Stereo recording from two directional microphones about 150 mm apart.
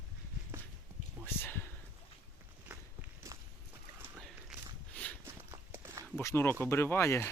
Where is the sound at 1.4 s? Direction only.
15° left (ahead or behind).